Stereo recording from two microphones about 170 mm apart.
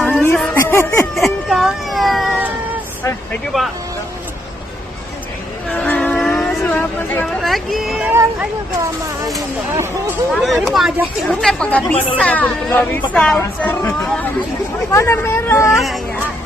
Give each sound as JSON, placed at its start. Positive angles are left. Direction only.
{"t": 0.2, "sound": "music", "side_deg": 10}
{"t": 1.1, "sound": "baby cry", "side_deg": 0}
{"t": 3.5, "sound": "speech", "side_deg": 0}
{"t": 5.7, "sound": "vehicle", "side_deg": 10}
{"t": 7.4, "sound": "speech", "side_deg": 0}
{"t": 8.1, "sound": "speech", "side_deg": -15}
{"t": 10.3, "sound": "speech", "side_deg": 0}
{"t": 15.7, "sound": "speech", "side_deg": 0}